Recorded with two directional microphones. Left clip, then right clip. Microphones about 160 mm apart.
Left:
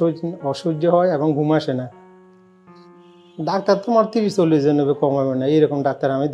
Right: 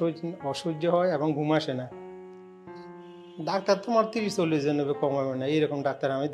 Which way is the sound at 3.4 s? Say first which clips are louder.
Left 7 dB; 45° left (ahead or behind).